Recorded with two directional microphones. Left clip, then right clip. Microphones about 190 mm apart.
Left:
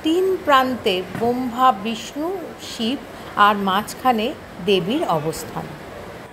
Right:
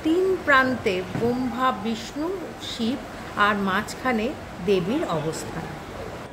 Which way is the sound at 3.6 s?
15° left (ahead or behind).